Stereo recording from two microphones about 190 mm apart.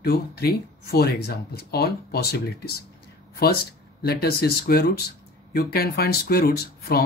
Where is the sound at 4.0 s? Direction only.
55° left (ahead or behind).